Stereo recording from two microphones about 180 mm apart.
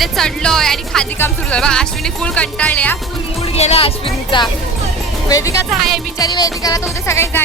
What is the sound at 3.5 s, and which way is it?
Speech, 35° left (ahead or behind).